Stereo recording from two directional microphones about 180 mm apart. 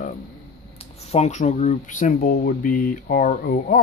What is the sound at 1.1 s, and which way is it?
Speech, 40° left (ahead or behind).